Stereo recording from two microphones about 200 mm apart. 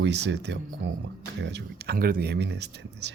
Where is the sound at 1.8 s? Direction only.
45° right (ahead or behind).